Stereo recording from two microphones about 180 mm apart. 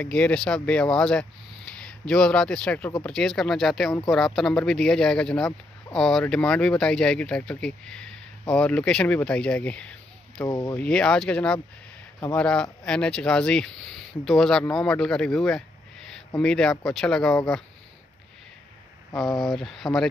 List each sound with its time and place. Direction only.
0.0 s speech: 5° left (ahead or behind)
10.4 s speech: 20° left (ahead or behind)
10.8 s speech: 5° left (ahead or behind)
19.1 s speech: centre (ahead or behind)